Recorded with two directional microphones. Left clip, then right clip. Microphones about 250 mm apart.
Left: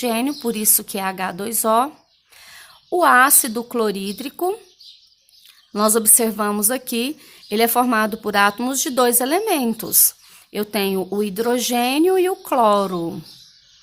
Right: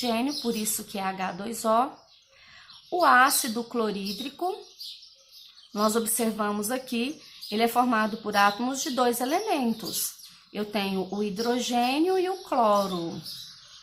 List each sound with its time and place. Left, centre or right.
0.0 s speech: left
5.7 s speech: left